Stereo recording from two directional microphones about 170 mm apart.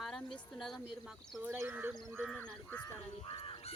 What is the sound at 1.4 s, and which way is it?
Speech, 15° right (ahead or behind).